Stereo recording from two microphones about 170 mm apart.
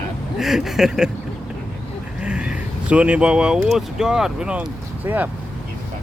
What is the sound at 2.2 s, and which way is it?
Speech, 5° right (ahead or behind).